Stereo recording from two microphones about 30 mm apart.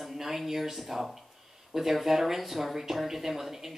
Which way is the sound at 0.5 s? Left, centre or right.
Centre.